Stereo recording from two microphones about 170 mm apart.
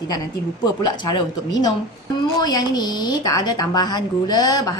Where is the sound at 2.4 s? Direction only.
25° left (ahead or behind).